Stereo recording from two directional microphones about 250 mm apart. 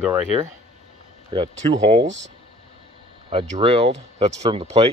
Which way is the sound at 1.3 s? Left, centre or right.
Centre.